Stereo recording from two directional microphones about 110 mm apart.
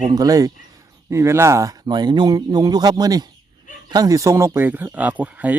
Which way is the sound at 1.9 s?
40° right (ahead or behind).